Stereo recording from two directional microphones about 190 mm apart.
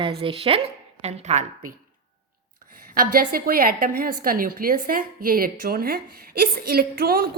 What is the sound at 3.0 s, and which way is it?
A woman's voice, 50° right (ahead or behind).